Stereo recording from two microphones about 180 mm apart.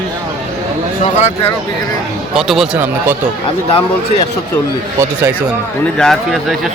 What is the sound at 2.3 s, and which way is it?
Speech, centre (ahead or behind).